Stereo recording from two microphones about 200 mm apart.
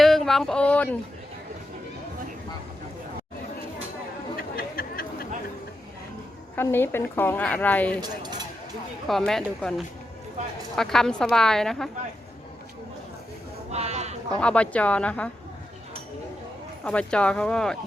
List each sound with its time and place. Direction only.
0.0 s speech: centre (ahead or behind)
4.4 s chatter: 50° left (ahead or behind)
6.6 s a woman's voice: 10° left (ahead or behind)
9.0 s a woman's voice: centre (ahead or behind)
13.7 s sheep: 35° right (ahead or behind)
14.3 s a woman's voice: 5° left (ahead or behind)
16.8 s a woman's voice: 5° left (ahead or behind)